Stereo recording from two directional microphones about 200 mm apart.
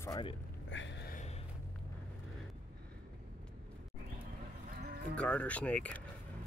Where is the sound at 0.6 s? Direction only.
65° left (ahead or behind).